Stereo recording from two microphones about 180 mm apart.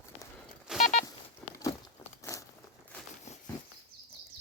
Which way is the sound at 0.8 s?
45° left (ahead or behind).